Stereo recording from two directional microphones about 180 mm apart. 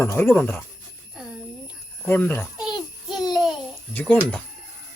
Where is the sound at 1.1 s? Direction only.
5° right (ahead or behind).